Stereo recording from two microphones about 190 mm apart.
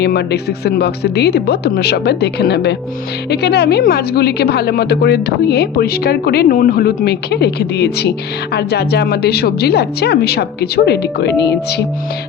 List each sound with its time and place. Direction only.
0.0 s a woman's voice: 60° left (ahead or behind)